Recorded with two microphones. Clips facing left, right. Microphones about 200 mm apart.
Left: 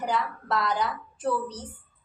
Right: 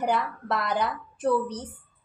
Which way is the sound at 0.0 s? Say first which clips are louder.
Right 2 dB; 60° right (ahead or behind).